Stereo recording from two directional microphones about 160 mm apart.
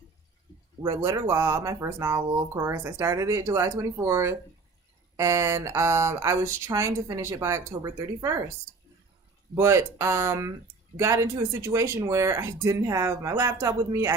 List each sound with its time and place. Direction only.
0.8 s speech: 25° right (ahead or behind)
9.6 s speech: 15° right (ahead or behind)